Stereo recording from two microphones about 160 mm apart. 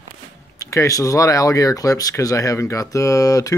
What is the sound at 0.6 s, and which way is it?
Speech, 20° left (ahead or behind).